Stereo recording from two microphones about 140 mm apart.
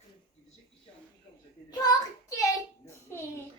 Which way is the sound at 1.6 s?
25° left (ahead or behind).